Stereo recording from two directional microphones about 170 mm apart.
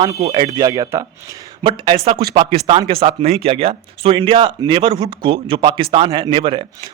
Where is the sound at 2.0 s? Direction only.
35° right (ahead or behind).